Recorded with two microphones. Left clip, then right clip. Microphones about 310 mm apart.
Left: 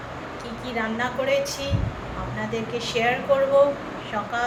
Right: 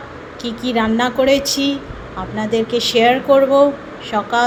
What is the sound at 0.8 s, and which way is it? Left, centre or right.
Speech, centre.